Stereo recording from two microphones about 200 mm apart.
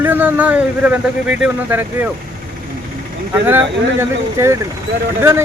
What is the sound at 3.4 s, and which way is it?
Speech, 10° right (ahead or behind).